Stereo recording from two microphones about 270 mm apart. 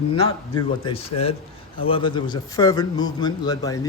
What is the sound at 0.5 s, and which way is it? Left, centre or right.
A man's voice, centre.